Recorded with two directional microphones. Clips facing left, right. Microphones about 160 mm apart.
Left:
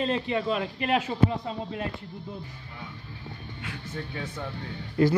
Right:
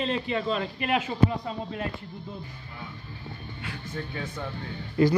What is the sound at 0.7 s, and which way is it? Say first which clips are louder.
Speech: even; 30° left (ahead or behind).